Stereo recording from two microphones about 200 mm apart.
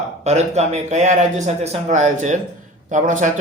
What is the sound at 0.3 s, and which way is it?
Speech, 35° right (ahead or behind).